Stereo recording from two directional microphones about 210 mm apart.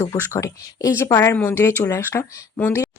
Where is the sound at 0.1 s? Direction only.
15° left (ahead or behind).